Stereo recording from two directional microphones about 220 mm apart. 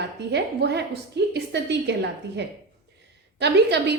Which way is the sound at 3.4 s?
50° right (ahead or behind).